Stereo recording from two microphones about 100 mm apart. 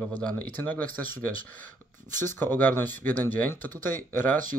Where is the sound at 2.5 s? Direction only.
20° left (ahead or behind).